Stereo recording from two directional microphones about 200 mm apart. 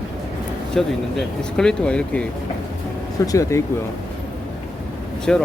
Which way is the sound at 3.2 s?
15° left (ahead or behind).